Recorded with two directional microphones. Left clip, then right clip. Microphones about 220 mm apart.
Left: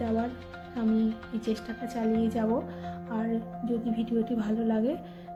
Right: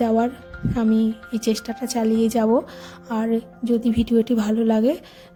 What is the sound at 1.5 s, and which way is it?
A woman's voice, 50° right (ahead or behind).